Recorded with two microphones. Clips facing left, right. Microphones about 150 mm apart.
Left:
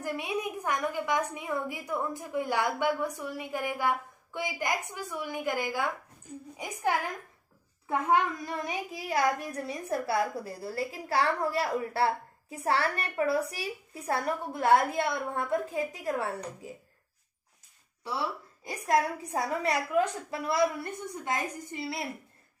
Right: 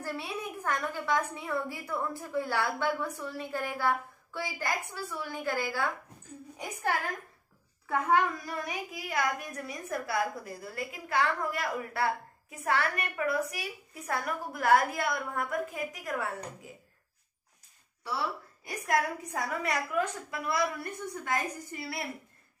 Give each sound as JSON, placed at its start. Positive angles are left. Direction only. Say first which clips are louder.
{"t": 0.0, "sound": "a woman's voice", "louder": "left 4 dB", "side_deg": 15}
{"t": 18.0, "sound": "a child's voice", "louder": "left 1 dB", "side_deg": 20}